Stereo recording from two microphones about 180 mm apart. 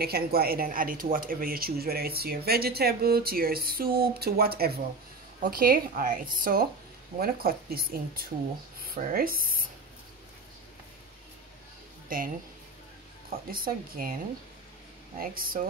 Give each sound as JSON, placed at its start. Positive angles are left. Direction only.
{"t": 0.0, "sound": "a woman's voice", "side_deg": -60}
{"t": 12.1, "sound": "a woman's voice", "side_deg": -50}
{"t": 13.3, "sound": "a woman's voice", "side_deg": -55}
{"t": 15.1, "sound": "a woman's voice", "side_deg": -55}